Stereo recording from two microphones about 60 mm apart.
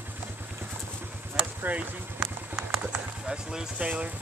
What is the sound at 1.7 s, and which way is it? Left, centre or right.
Speech, right.